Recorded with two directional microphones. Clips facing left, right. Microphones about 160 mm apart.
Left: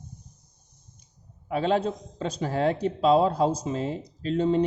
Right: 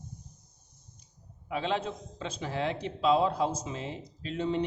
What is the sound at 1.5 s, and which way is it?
A man's voice, 45° left (ahead or behind).